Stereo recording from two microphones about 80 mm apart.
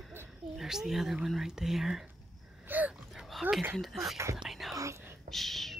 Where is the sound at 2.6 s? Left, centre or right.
Right.